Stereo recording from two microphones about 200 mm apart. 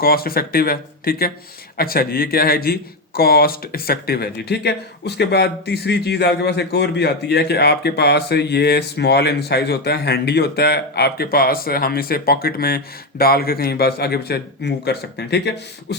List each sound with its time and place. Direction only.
0.0 s speech: 50° left (ahead or behind)